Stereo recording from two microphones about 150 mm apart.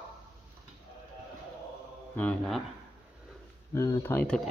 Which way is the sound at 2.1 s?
5° left (ahead or behind).